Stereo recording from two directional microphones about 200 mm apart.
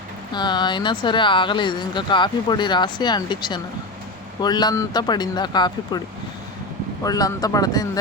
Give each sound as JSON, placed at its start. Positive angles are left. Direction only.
{"t": 0.3, "sound": "speech", "side_deg": 20}
{"t": 7.0, "sound": "speech", "side_deg": 20}